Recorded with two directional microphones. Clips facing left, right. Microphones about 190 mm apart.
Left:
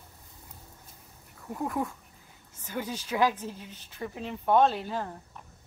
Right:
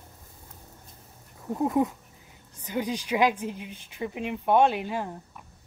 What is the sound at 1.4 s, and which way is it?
A woman's voice, 25° right (ahead or behind).